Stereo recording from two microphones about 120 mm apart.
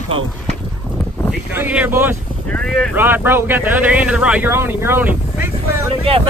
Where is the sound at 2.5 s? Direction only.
5° left (ahead or behind).